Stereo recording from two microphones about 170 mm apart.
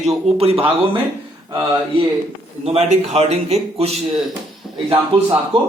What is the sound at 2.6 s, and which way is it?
A man's voice, 35° right (ahead or behind).